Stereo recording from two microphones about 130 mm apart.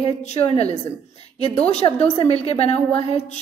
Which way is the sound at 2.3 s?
50° left (ahead or behind).